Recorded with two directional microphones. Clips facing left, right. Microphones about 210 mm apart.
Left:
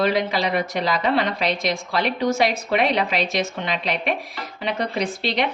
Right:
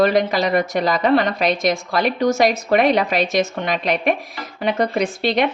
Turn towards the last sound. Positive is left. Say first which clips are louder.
# right 5 dB
turn(degrees=-50)  # may be behind; listen again after turning